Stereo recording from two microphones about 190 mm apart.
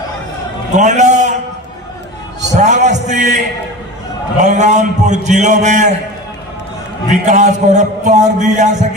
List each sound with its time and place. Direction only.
0.8 s a man's voice: 40° right (ahead or behind)
2.6 s music: 40° right (ahead or behind)
4.4 s a man's voice: 40° right (ahead or behind)
7.1 s a man's voice: 40° right (ahead or behind)